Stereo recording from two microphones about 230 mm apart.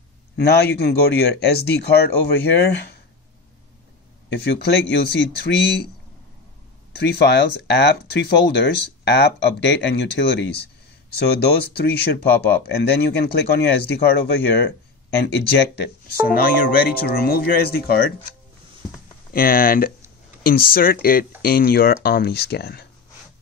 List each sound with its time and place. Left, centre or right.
0.4 s speech: left
4.5 s speech: left
7.0 s speech: left
11.7 s speech: left
19.3 s speech: left